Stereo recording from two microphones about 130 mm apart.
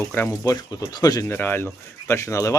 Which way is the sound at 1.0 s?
30° left (ahead or behind).